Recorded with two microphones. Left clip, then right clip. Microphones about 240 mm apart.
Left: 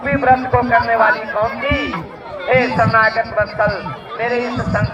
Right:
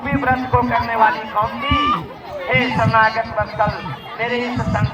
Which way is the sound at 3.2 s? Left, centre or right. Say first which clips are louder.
Left 3 dB; right.